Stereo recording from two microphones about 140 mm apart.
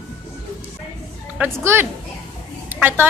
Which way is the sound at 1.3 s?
15° right (ahead or behind).